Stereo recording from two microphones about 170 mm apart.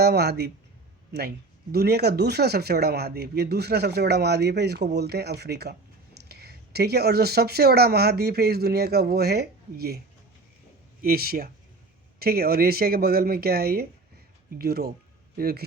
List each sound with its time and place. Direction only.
0.0 s speech: 75° right (ahead or behind)
1.7 s speech: 70° right (ahead or behind)
11.0 s speech: 60° right (ahead or behind)